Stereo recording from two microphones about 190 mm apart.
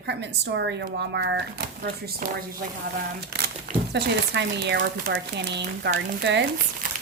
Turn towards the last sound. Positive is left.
turn(degrees=-65)  # may be behind; listen again after turning